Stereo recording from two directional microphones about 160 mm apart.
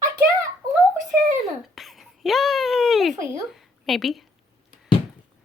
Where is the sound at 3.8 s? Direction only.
Centre (ahead or behind).